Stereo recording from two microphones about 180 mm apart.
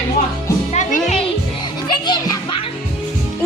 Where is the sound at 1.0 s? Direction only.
35° left (ahead or behind).